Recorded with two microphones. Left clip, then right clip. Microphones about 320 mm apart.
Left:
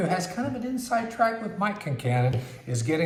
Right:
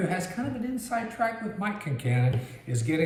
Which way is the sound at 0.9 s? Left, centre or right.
Centre.